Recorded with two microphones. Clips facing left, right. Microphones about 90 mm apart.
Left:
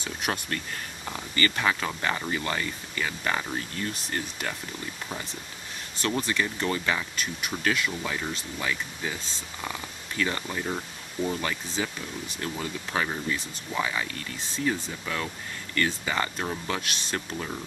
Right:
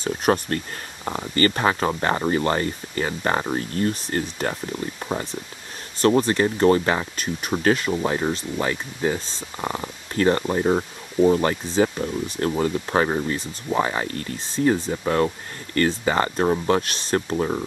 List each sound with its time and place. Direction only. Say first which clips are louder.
0.0 s speech: right 10 dB; 40° right (ahead or behind)